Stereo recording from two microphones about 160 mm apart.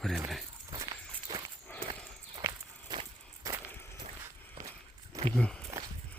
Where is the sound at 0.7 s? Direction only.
25° right (ahead or behind).